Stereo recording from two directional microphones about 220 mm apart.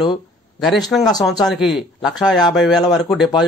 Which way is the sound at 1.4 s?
Centre (ahead or behind).